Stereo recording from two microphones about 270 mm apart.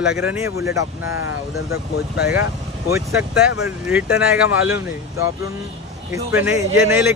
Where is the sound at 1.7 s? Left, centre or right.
Left.